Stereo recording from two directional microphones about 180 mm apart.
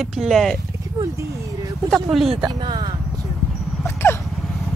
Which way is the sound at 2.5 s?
25° right (ahead or behind).